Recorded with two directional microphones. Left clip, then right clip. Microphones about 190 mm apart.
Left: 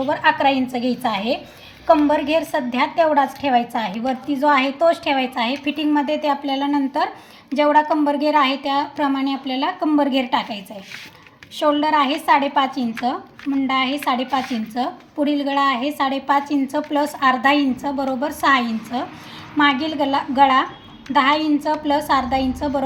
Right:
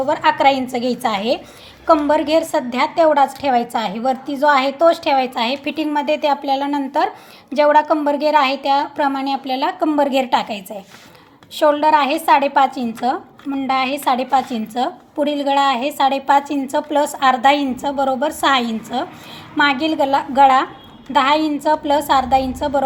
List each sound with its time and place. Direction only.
0.0 s a woman's voice: 35° right (ahead or behind)